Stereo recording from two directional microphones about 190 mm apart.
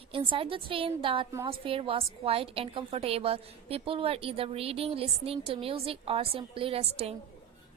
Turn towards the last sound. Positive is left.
turn(degrees=-35)  # may be behind; listen again after turning